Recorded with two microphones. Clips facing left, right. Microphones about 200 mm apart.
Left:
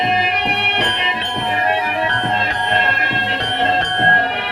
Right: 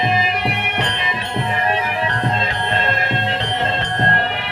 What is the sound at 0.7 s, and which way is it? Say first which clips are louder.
Music: left 2 dB; 60° left (ahead or behind).